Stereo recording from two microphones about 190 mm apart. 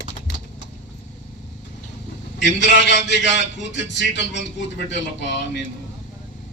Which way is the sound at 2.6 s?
65° left (ahead or behind).